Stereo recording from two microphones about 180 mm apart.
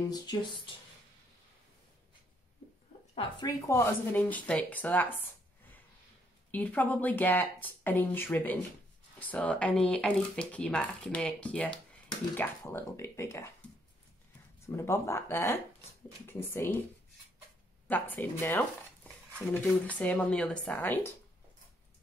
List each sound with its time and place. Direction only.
0.1 s speech: 25° left (ahead or behind)
3.2 s speech: 20° left (ahead or behind)
14.7 s speech: 15° left (ahead or behind)
17.8 s speech: 10° left (ahead or behind)